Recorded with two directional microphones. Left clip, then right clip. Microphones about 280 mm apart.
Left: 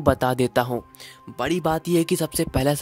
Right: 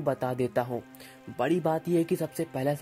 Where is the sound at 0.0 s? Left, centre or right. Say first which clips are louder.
Left 8 dB; centre.